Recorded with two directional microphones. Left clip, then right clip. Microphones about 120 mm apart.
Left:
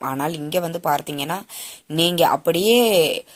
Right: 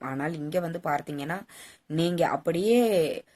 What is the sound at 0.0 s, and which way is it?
Speech, 25° left (ahead or behind).